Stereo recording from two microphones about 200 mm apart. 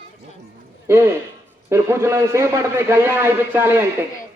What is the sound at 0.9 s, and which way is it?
A man's voice, 10° right (ahead or behind).